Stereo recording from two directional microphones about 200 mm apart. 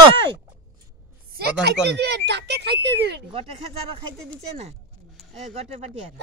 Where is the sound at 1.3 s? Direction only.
50° right (ahead or behind).